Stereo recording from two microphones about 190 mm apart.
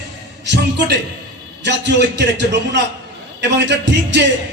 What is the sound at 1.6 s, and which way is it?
A man's voice, 65° right (ahead or behind).